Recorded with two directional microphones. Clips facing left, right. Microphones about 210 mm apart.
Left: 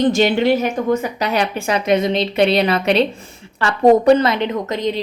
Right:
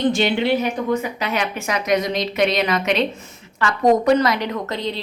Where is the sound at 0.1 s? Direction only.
45° left (ahead or behind).